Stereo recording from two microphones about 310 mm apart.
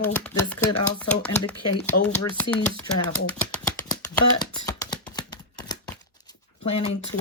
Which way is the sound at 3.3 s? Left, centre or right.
Centre.